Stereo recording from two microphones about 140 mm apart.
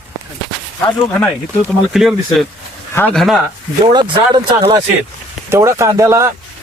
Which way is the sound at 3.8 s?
30° right (ahead or behind).